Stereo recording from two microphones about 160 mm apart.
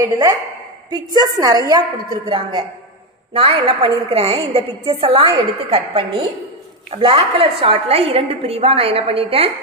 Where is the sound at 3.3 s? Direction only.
35° right (ahead or behind).